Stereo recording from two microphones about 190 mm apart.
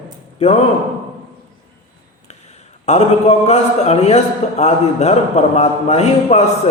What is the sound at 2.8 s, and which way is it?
A man's voice, 35° left (ahead or behind).